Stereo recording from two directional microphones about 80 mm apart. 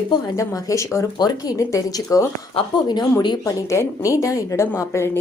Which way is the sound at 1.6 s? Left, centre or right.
Left.